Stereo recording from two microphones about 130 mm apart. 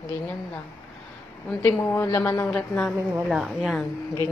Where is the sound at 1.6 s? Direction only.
20° left (ahead or behind).